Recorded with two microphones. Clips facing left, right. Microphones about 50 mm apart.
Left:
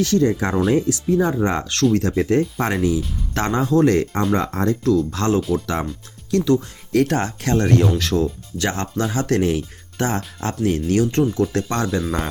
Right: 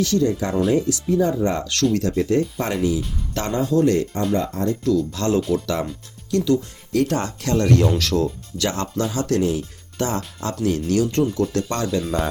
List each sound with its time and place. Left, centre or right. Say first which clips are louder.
0.0 s speech: left 2 dB; left
5.4 s speech: even; centre
6.3 s speech: left 2 dB; left
10.0 s speech: left 1 dB; left